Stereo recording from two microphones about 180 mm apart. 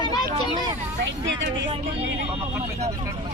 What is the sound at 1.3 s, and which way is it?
Speech, 90° right.